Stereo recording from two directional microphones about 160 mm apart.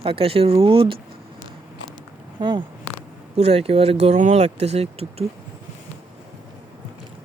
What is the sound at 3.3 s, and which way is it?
Speech, 40° right (ahead or behind).